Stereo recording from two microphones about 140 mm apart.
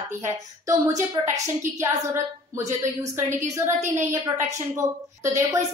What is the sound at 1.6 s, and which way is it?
Speech, 20° right (ahead or behind).